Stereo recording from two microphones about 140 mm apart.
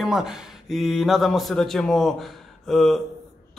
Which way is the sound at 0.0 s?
5° right (ahead or behind).